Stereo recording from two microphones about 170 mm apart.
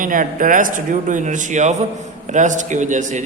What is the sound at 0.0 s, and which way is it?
A man's voice, 55° right (ahead or behind).